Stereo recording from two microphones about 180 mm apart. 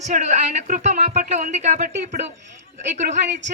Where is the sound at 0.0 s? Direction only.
40° right (ahead or behind).